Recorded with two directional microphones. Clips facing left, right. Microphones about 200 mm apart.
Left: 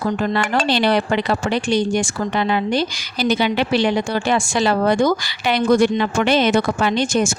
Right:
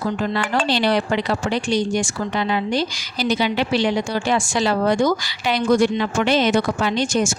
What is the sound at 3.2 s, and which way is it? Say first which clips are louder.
Speech: left 2 dB; 60° left (ahead or behind).